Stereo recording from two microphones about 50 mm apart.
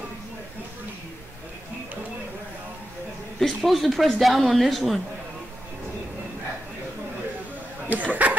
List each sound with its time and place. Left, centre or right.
3.3 s speech: centre
7.9 s chuckle: right